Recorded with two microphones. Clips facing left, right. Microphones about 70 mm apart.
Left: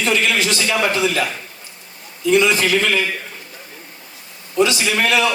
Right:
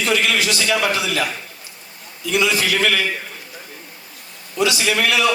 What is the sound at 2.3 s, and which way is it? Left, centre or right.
Speech, left.